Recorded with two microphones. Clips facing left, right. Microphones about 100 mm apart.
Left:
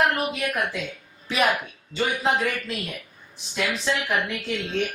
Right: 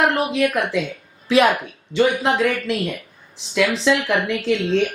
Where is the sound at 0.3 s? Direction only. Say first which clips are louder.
Right 7 dB; 85° right.